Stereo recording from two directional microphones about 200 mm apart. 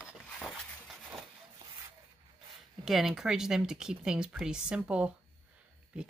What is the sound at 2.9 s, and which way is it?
Speech, centre (ahead or behind).